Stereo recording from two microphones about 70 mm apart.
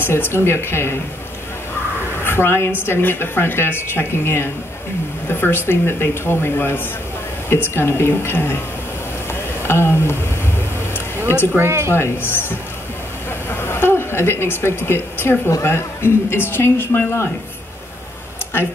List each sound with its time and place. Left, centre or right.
0.0 s a woman's voice: left
2.2 s a woman's voice: left
9.3 s a sound: left
11.9 s a woman's voice: left